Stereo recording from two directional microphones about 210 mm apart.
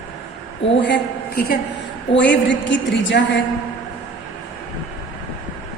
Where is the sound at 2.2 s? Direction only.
60° left (ahead or behind).